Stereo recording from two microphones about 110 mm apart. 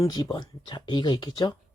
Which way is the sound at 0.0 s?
40° left (ahead or behind).